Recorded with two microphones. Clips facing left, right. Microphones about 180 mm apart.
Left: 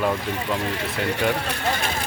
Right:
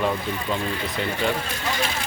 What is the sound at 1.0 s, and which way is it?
Speech, 70° left (ahead or behind).